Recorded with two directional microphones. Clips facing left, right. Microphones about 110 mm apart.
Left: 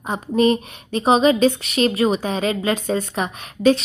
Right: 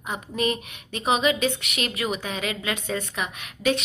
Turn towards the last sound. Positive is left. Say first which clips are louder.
# left 8 dB
turn(degrees=35)  # may be behind; listen again after turning